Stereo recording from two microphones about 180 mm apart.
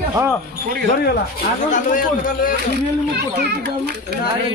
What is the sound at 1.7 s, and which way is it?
Speech, 45° left (ahead or behind).